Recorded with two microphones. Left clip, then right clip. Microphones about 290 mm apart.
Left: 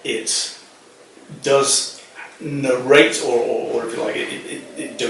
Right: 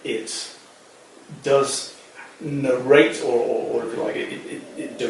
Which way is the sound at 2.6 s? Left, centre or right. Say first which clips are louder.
Left 3 dB; centre.